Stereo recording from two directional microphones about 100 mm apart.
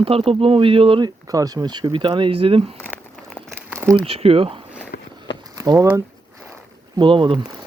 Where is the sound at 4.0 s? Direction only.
75° right (ahead or behind).